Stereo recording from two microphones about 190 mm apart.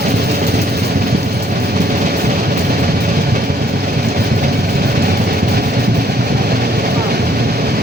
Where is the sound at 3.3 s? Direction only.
50° right (ahead or behind).